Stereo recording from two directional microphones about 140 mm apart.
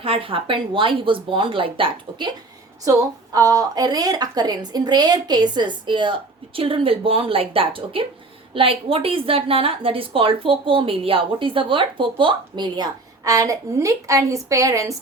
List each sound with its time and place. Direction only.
0.0 s a woman's voice: 40° right (ahead or behind)
2.8 s a woman's voice: 25° right (ahead or behind)